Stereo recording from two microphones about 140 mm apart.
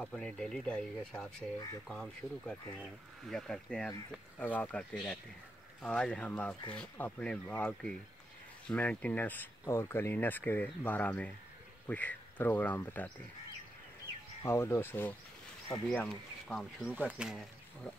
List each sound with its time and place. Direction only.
0.0 s speech: 5° left (ahead or behind)
14.4 s speech: 20° left (ahead or behind); by 16.9 s centre (ahead or behind)
16.9 s speech: 10° right (ahead or behind)